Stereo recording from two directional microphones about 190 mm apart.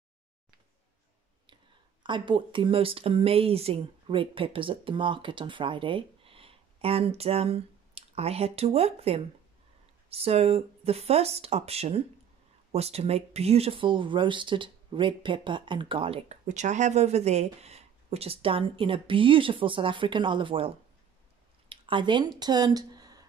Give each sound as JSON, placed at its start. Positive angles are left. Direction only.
{"t": 2.0, "sound": "speech", "side_deg": -25}
{"t": 21.6, "sound": "a sound", "side_deg": -25}
{"t": 22.4, "sound": "speech", "side_deg": -20}